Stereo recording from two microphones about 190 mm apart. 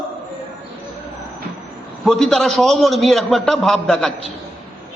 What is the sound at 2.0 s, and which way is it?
A man's voice, 5° left (ahead or behind).